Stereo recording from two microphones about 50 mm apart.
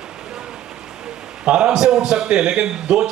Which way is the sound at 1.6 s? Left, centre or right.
Centre.